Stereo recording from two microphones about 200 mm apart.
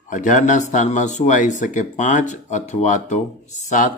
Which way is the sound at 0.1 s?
40° left (ahead or behind).